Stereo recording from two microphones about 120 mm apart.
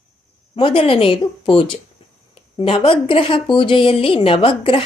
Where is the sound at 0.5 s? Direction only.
50° left (ahead or behind).